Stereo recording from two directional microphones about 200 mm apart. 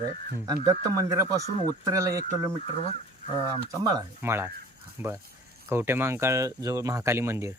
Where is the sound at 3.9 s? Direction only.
15° right (ahead or behind).